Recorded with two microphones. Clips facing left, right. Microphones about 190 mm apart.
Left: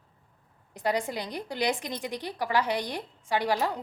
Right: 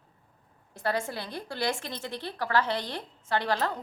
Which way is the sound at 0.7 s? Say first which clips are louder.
Left 2 dB; 15° left (ahead or behind).